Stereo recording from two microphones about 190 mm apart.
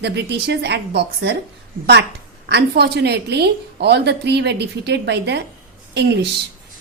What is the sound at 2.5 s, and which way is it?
A woman's voice, 60° right (ahead or behind).